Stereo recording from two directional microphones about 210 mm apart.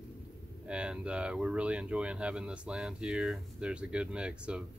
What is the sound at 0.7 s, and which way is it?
Speech, 5° right (ahead or behind).